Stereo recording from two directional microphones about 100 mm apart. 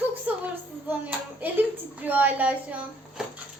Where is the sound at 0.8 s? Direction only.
15° right (ahead or behind).